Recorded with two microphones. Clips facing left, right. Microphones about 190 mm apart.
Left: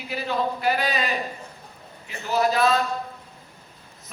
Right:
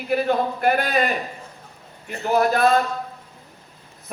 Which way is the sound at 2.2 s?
55° right (ahead or behind).